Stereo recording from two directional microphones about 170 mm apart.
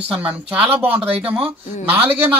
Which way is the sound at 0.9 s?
35° right (ahead or behind).